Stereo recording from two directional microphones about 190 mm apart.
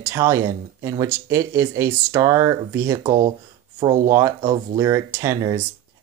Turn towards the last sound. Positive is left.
turn(degrees=-15)  # may be behind; listen again after turning